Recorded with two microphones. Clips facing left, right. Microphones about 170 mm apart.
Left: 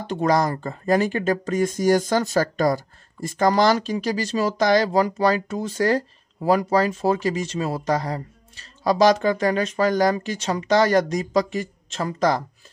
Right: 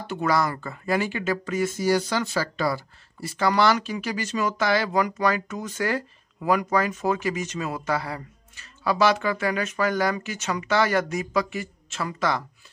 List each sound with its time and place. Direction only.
0.1 s speech: 35° left (ahead or behind)